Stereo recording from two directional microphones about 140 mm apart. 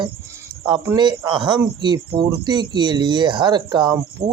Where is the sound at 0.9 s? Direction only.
30° right (ahead or behind).